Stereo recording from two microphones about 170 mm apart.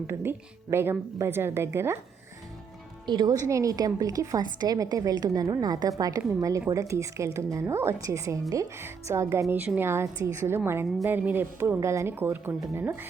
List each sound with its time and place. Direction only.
0.1 s a woman's voice: 15° right (ahead or behind)
3.1 s a woman's voice: 25° right (ahead or behind)